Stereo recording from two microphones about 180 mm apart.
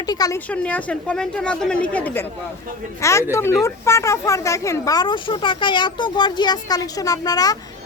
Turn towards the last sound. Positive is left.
turn(degrees=20)  # may be behind; listen again after turning